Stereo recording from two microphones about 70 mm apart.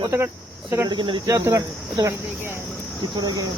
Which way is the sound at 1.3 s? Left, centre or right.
Right.